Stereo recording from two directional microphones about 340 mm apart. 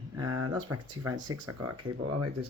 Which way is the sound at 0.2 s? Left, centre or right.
Right.